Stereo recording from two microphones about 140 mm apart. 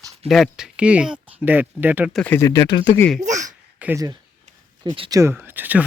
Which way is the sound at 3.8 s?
10° right (ahead or behind).